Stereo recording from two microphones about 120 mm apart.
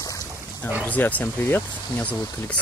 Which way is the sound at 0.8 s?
15° left (ahead or behind).